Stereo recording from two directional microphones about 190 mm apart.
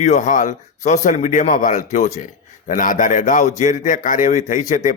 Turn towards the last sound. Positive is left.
turn(degrees=40)  # may be behind; listen again after turning